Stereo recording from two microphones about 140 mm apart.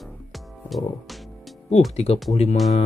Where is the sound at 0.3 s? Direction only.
Centre (ahead or behind).